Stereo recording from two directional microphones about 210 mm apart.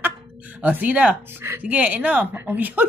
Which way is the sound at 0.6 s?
5° right (ahead or behind).